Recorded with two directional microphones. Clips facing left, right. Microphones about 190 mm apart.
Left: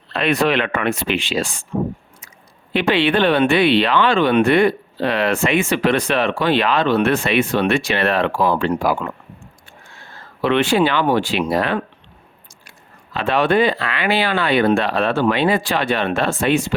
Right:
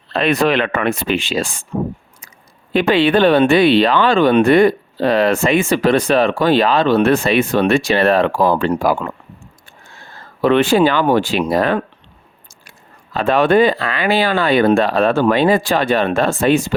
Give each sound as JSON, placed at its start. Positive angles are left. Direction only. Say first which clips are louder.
{"t": 0.1, "sound": "speech", "louder": "right 2 dB", "side_deg": -35}
{"t": 2.7, "sound": "speech", "louder": "right 4 dB", "side_deg": -40}
{"t": 10.4, "sound": "speech", "louder": "right 4 dB", "side_deg": -45}
{"t": 13.1, "sound": "speech", "louder": "right 4 dB", "side_deg": -45}